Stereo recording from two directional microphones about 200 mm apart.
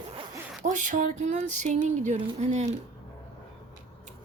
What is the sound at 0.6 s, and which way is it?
Speech, 40° right (ahead or behind).